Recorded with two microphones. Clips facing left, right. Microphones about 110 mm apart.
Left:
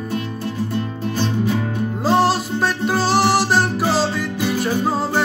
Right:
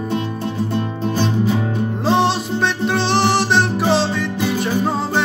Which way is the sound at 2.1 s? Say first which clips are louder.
Left 1 dB; 5° left (ahead or behind).